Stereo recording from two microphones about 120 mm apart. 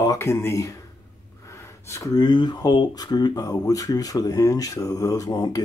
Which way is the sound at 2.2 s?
40° left (ahead or behind).